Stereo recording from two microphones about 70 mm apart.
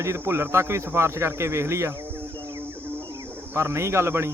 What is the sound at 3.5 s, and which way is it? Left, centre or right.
Speech, right.